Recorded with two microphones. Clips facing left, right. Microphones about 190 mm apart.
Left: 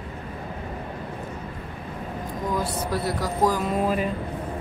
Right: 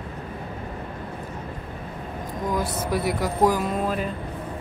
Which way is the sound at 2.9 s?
15° right (ahead or behind).